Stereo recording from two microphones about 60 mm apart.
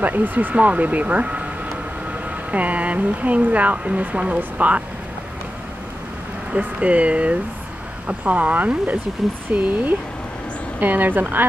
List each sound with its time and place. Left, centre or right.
0.0 s speech: right
6.5 s a woman's voice: right